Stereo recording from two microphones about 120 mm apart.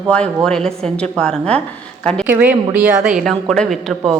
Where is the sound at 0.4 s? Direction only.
5° left (ahead or behind).